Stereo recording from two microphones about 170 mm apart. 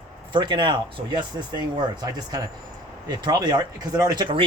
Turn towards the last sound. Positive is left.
turn(degrees=-25)  # may be behind; listen again after turning